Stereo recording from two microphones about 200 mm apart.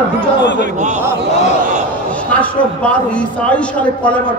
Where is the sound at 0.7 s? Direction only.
35° right (ahead or behind).